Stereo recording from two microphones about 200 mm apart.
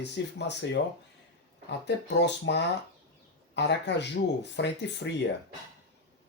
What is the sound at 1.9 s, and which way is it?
Speech, 60° left (ahead or behind).